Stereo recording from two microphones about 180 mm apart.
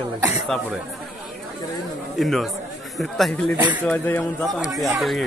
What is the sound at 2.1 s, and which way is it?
A man's voice, centre (ahead or behind).